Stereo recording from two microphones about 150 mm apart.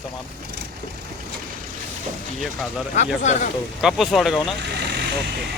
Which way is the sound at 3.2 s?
50° left (ahead or behind).